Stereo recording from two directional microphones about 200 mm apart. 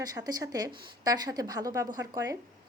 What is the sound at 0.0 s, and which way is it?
A woman's voice, 20° right (ahead or behind).